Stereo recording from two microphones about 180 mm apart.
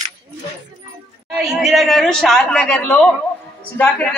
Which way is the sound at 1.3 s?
Centre (ahead or behind).